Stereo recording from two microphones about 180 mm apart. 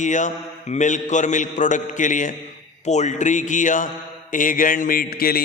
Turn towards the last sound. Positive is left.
turn(degrees=55)  # may be behind; listen again after turning